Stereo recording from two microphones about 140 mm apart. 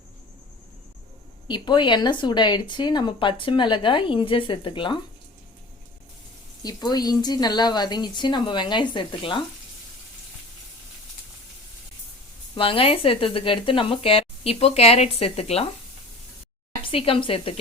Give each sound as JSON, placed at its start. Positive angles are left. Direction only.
{"t": 1.5, "sound": "speech", "side_deg": 35}
{"t": 6.6, "sound": "speech", "side_deg": 30}
{"t": 12.5, "sound": "speech", "side_deg": 40}
{"t": 16.8, "sound": "speech", "side_deg": 40}